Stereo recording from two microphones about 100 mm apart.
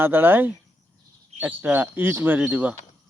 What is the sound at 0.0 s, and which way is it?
Speech, 20° right (ahead or behind).